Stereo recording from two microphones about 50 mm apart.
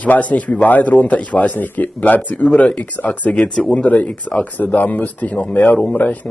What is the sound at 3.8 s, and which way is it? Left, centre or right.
Speech, left.